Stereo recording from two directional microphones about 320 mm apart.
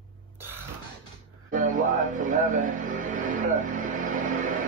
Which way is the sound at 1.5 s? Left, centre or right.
Right.